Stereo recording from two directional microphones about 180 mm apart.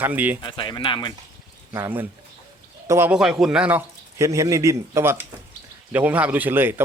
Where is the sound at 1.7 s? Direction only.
15° right (ahead or behind).